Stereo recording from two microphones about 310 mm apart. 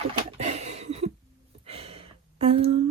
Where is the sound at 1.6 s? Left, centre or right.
Centre.